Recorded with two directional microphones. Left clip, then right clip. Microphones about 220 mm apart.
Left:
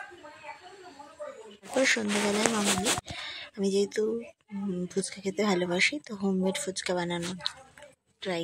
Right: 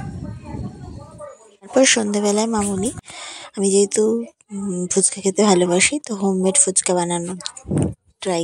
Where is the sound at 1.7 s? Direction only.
35° right (ahead or behind).